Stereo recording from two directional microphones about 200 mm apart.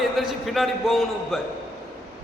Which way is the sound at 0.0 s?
Centre (ahead or behind).